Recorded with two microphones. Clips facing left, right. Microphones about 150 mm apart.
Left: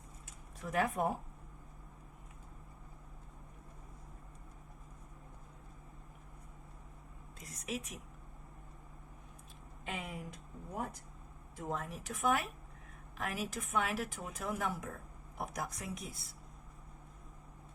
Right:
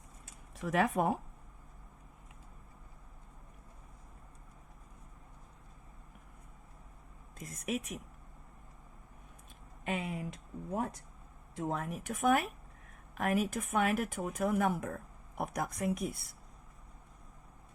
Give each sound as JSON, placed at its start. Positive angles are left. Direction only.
{"t": 0.6, "sound": "speech", "side_deg": -85}
{"t": 7.3, "sound": "a sound", "side_deg": -50}
{"t": 9.8, "sound": "speech", "side_deg": -70}
{"t": 11.5, "sound": "speech", "side_deg": -65}